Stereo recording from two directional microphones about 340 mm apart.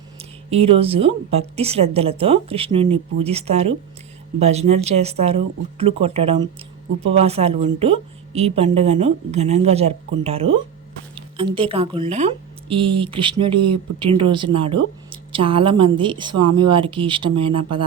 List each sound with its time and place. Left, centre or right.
0.2 s a woman's voice: centre